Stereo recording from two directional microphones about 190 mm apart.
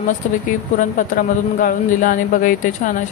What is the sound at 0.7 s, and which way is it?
Speech, 45° left (ahead or behind).